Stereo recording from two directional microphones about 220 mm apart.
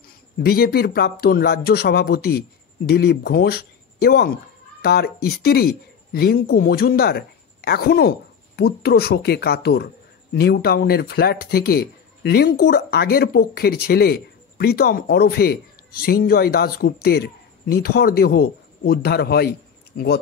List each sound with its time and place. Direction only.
0.4 s speech: 45° left (ahead or behind)